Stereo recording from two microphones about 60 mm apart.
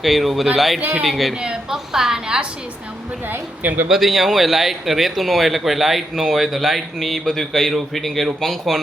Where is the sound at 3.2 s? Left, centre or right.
Right.